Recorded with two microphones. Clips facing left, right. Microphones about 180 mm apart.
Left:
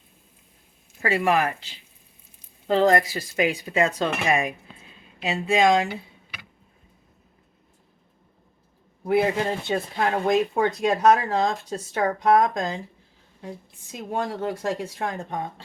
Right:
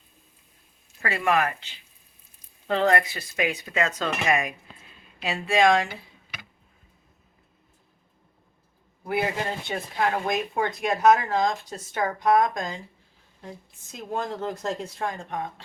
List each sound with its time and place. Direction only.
1.0 s speech: 35° left (ahead or behind); by 6.0 s 20° left (ahead or behind)
9.6 s speech: 25° left (ahead or behind)
13.9 s speech: 15° left (ahead or behind)
15.3 s speech: 30° left (ahead or behind)